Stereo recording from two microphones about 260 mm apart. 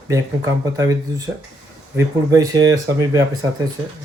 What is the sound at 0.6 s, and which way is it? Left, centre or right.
Speech, centre.